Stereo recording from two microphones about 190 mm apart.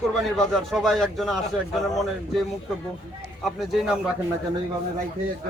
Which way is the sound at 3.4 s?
Centre (ahead or behind).